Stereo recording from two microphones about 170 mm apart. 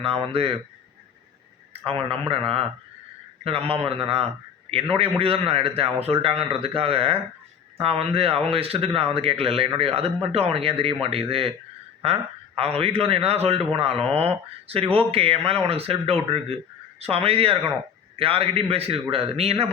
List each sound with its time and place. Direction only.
0.0 s speech: 35° right (ahead or behind)
1.7 s speech: 35° right (ahead or behind)
3.4 s speech: 35° right (ahead or behind)